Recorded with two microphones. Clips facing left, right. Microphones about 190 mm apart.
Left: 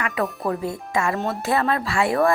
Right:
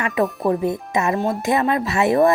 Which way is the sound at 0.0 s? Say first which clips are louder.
Right 5 dB; 20° right (ahead or behind).